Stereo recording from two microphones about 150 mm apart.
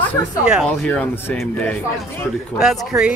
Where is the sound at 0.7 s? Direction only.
10° left (ahead or behind).